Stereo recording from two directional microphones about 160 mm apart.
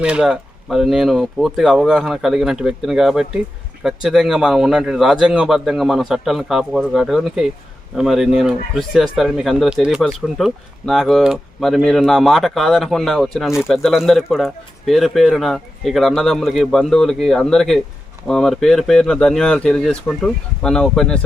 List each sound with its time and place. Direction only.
0.0 s speech: 5° right (ahead or behind)